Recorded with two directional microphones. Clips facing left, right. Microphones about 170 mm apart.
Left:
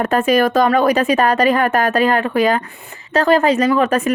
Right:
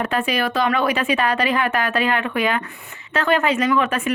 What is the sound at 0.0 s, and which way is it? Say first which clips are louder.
A woman's voice: left 7 dB; 45° left (ahead or behind).